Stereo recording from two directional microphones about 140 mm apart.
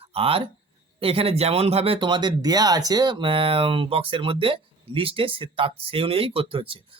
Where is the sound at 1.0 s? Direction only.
45° right (ahead or behind).